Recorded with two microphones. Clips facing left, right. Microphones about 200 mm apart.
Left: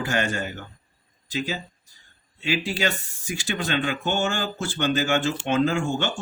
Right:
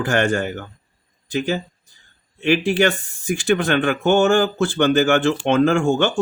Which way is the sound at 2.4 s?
55° right (ahead or behind).